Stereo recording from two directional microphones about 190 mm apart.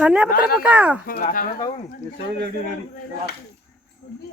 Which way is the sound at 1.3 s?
50° left (ahead or behind).